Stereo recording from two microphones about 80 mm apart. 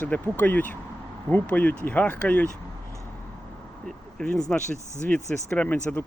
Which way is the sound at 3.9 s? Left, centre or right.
Centre.